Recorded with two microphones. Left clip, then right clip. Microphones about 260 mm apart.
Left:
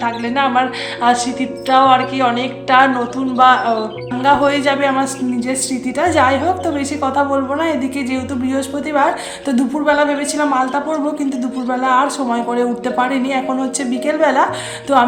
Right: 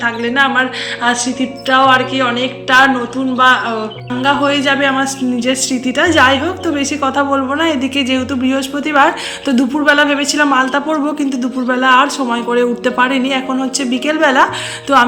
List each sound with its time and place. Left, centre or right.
0.0 s a man's voice: centre